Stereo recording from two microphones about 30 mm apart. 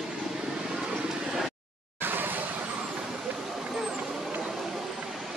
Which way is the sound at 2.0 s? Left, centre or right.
Right.